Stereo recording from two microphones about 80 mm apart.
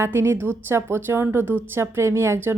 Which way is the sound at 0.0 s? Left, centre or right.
Right.